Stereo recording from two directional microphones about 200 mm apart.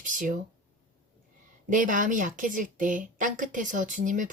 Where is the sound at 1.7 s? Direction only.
40° right (ahead or behind).